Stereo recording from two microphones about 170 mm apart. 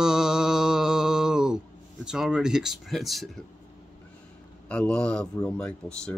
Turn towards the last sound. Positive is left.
turn(degrees=5)  # may be behind; listen again after turning